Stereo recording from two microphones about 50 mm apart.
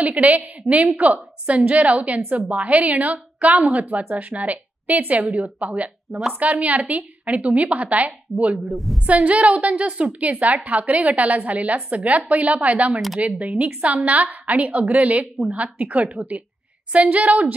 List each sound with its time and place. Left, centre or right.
0.0 s a woman's voice: right
8.6 s a woman's voice: centre
9.0 s a woman's voice: right